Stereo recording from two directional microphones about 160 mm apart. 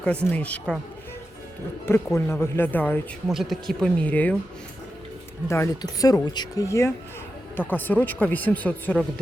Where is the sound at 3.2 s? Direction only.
Centre (ahead or behind).